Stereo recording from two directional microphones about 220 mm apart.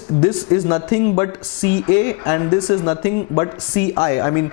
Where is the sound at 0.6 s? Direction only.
20° left (ahead or behind).